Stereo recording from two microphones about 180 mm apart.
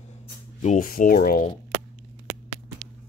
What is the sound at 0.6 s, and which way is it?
Speech, 45° left (ahead or behind).